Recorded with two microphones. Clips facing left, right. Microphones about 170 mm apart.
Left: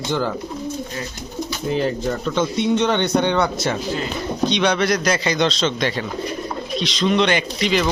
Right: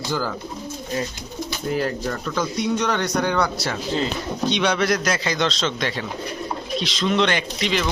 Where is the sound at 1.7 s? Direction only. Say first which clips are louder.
Left 3 dB; 20° left (ahead or behind).